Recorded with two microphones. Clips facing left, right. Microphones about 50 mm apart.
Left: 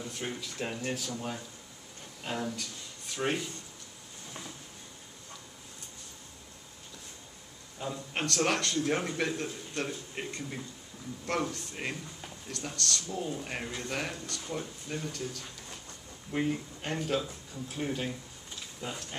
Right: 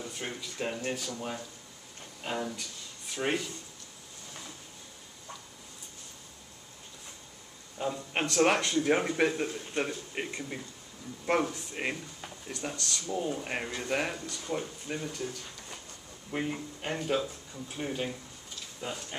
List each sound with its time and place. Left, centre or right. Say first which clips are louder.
0.0 s speech: left 1 dB; centre
7.8 s speech: right 3 dB; centre